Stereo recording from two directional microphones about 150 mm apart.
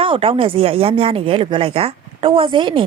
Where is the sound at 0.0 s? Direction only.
40° right (ahead or behind).